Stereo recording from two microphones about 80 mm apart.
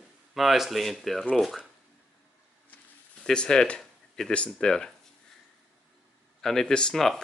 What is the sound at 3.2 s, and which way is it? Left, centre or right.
Speech, centre.